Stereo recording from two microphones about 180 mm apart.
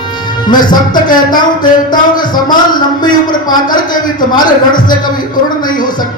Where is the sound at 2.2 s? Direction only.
50° left (ahead or behind).